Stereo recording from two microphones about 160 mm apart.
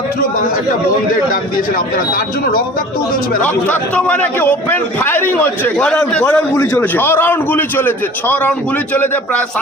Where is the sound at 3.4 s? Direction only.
10° left (ahead or behind).